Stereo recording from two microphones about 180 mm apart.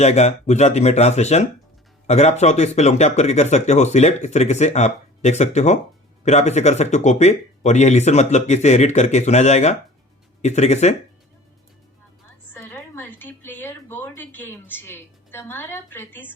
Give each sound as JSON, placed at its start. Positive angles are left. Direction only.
{"t": 0.0, "sound": "speech", "side_deg": 40}
{"t": 12.5, "sound": "a woman's voice", "side_deg": 10}